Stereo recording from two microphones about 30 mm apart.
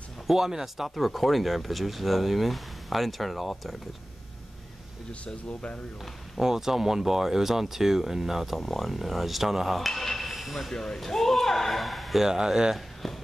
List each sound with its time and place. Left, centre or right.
0.3 s speech: centre
0.8 s speech: centre
5.2 s speech: left
6.4 s speech: centre
10.3 s hiss: centre
10.7 s speech: centre
11.1 s speech: centre
12.2 s speech: centre
12.7 s a sound: centre